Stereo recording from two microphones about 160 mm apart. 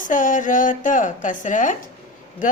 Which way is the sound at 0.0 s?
55° left (ahead or behind).